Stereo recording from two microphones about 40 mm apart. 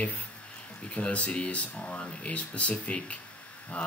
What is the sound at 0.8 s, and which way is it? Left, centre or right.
Speech, left.